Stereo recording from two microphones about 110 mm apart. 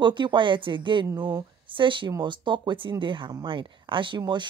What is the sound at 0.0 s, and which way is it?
Speech, 45° right (ahead or behind).